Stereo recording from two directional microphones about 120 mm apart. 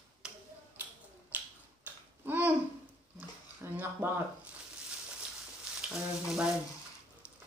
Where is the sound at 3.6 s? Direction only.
20° right (ahead or behind).